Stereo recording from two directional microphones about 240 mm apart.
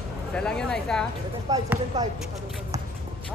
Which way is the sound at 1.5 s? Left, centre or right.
Centre.